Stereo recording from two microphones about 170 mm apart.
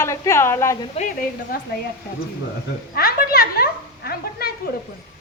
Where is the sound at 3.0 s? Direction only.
60° left (ahead or behind).